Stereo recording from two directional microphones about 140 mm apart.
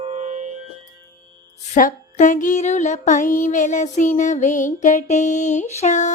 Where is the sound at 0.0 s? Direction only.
55° right (ahead or behind).